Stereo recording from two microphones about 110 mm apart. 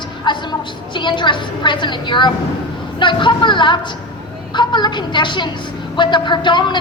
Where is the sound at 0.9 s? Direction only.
45° left (ahead or behind).